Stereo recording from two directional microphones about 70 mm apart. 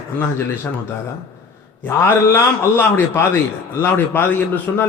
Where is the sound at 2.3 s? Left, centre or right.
Left.